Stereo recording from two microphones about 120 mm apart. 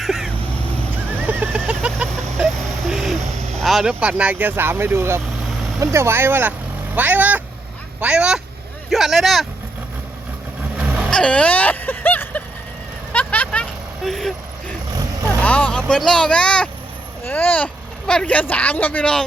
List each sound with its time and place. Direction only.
0.0 s vehicle: centre (ahead or behind)
1.3 s vehicle: 10° right (ahead or behind)
3.5 s speech: centre (ahead or behind)
10.8 s vehicle: 10° right (ahead or behind)
11.1 s a sound: 10° left (ahead or behind)
13.1 s vehicle: 15° left (ahead or behind)
14.0 s speech: centre (ahead or behind)